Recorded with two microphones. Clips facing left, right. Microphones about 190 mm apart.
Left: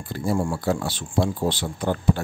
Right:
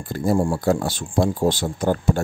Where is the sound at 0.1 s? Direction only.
45° right (ahead or behind).